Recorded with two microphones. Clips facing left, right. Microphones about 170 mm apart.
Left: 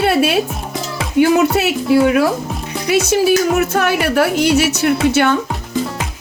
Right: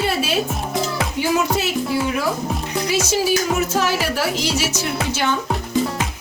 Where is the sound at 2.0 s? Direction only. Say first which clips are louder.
Left 7 dB; 65° left (ahead or behind).